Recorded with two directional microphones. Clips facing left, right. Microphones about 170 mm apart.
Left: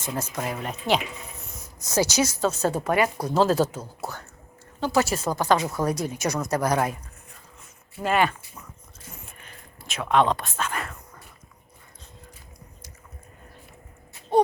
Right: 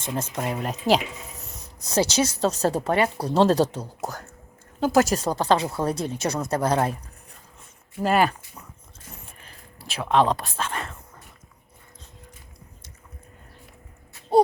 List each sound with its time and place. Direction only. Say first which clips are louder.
0.3 s speech: right 3 dB; 25° right (ahead or behind)
0.7 s speech: right 4 dB; 40° right (ahead or behind)
8.0 s speech: right 2 dB; 40° right (ahead or behind)
9.4 s a sound: right 1 dB; 35° right (ahead or behind)